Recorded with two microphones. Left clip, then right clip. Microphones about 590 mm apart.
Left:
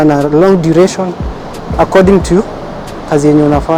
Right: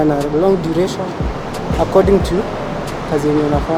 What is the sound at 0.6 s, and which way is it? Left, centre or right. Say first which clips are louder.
Speech: left 9 dB; left.